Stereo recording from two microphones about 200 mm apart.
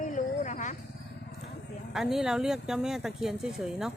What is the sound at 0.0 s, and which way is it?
Cricket, 40° left (ahead or behind).